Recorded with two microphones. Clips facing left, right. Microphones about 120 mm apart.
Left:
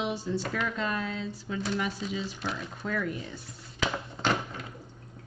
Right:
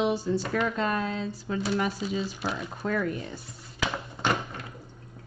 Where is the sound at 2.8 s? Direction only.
45° right (ahead or behind).